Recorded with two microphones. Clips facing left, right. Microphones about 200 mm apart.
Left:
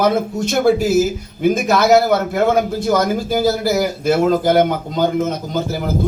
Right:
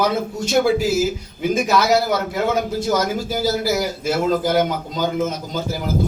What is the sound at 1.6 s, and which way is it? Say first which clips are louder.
A man's voice: left 5 dB; 50° left (ahead or behind).